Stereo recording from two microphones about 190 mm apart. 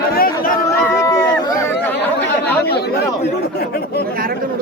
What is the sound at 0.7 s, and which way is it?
Chatter, 15° left (ahead or behind).